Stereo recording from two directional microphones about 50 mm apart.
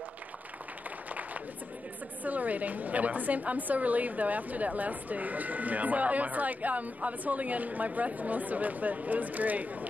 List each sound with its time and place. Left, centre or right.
2.2 s a woman's voice: right